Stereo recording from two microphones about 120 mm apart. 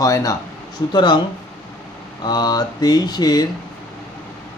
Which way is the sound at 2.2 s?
35° left (ahead or behind).